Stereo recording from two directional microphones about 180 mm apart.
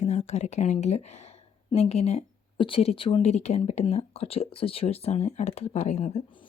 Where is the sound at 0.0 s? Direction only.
40° left (ahead or behind).